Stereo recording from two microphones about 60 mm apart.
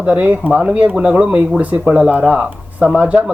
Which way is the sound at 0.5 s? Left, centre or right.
Centre.